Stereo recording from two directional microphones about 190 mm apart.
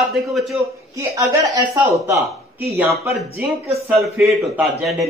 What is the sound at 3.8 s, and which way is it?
Speech, 10° right (ahead or behind).